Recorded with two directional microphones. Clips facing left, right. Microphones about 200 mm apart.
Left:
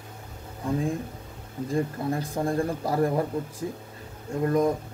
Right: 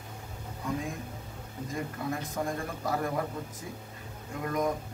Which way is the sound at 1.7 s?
30° left (ahead or behind).